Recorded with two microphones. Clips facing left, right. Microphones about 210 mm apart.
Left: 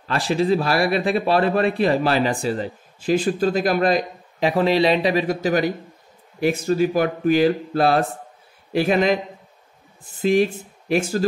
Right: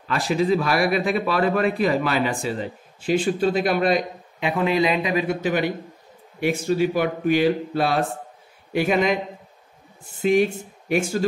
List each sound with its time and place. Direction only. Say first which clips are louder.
0.1 s a man's voice: left 1 dB; 30° left (ahead or behind)
10.2 s a man's voice: left 1 dB; 35° left (ahead or behind)